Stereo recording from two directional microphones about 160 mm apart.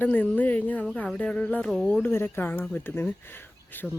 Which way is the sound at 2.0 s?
15° left (ahead or behind).